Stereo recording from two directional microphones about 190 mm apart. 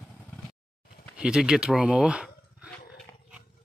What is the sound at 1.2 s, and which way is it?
Speech, 5° right (ahead or behind).